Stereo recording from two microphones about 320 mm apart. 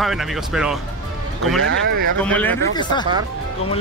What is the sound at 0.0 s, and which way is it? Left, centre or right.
Speech, centre.